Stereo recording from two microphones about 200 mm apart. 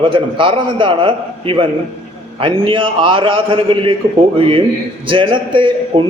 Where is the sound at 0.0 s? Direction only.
25° right (ahead or behind).